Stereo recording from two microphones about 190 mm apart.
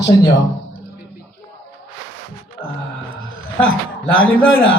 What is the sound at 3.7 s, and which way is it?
Speech, 90° left.